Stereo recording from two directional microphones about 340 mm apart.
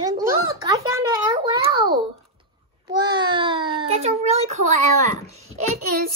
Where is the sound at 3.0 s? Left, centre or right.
Centre.